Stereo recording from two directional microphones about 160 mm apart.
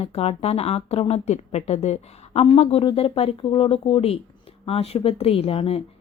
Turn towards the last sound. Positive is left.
turn(degrees=40)  # may be behind; listen again after turning